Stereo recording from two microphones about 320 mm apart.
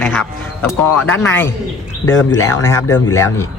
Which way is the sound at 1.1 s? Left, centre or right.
Centre.